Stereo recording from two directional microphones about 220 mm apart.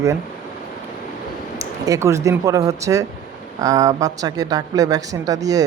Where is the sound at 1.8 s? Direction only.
15° right (ahead or behind).